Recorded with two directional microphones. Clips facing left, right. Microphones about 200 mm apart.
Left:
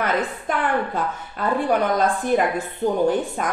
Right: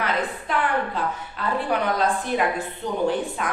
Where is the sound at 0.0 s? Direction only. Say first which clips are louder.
Left 3 dB; 45° left (ahead or behind).